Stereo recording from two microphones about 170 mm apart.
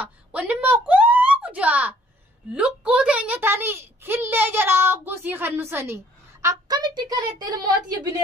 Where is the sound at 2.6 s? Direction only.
5° right (ahead or behind).